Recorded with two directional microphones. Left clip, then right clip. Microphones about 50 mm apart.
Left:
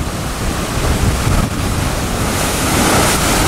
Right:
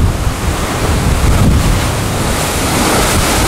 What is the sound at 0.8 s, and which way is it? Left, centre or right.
Waves, centre.